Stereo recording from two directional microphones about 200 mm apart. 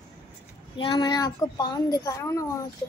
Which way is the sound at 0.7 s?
25° left (ahead or behind).